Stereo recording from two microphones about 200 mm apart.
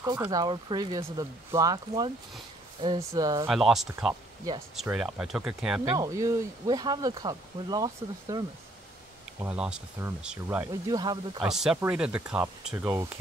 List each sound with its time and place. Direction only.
0.0 s speech: 20° right (ahead or behind)
3.4 s speech: centre (ahead or behind)
3.9 s speech: 10° right (ahead or behind)
5.9 s speech: 15° right (ahead or behind)
9.4 s speech: 5° right (ahead or behind)
10.7 s speech: 20° right (ahead or behind)
11.4 s speech: centre (ahead or behind)